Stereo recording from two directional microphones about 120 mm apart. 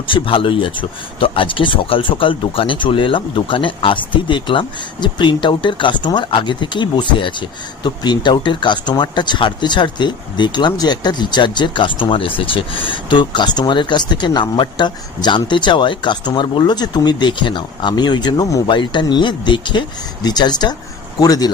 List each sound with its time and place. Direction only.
0.1 s speech: 45° left (ahead or behind)